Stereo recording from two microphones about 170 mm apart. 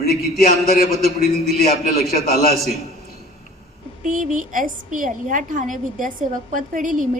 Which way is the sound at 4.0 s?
50° right (ahead or behind).